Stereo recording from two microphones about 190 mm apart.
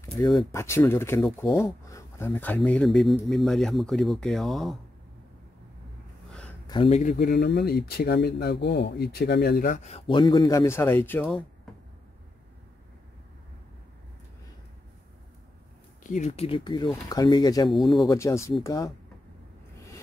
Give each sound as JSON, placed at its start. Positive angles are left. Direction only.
{"t": 0.4, "sound": "speech", "side_deg": 15}
{"t": 6.7, "sound": "speech", "side_deg": 30}
{"t": 7.0, "sound": "speech", "side_deg": 50}
{"t": 16.0, "sound": "speech", "side_deg": 40}
{"t": 17.6, "sound": "speech", "side_deg": 0}
{"t": 18.0, "sound": "speech", "side_deg": 15}